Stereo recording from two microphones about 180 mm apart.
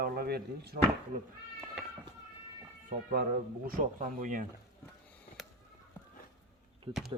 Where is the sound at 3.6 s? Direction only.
50° right (ahead or behind).